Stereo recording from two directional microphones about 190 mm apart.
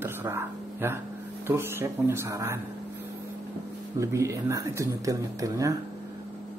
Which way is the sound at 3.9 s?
15° right (ahead or behind).